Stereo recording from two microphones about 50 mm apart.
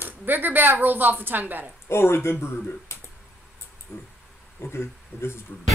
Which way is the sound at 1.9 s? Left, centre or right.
Left.